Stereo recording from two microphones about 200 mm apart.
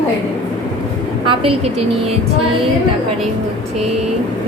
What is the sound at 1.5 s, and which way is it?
Speech, 30° right (ahead or behind).